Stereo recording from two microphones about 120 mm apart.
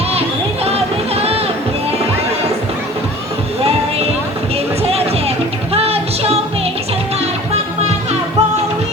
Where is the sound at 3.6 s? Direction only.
55° right (ahead or behind).